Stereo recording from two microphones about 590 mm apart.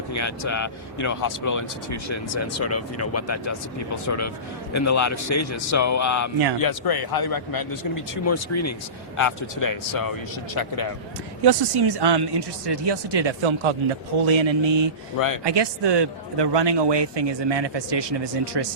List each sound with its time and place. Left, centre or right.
0.1 s speech: left
11.4 s a man's voice: right